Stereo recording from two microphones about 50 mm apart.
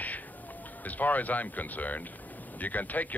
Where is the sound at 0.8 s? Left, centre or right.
Left.